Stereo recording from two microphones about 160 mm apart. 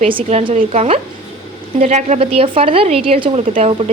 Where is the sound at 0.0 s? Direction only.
35° right (ahead or behind).